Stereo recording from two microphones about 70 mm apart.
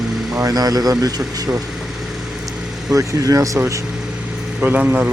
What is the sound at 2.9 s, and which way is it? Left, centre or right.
Speech, right.